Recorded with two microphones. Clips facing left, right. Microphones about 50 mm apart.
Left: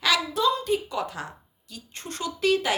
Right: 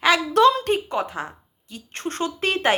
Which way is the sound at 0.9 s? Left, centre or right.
Right.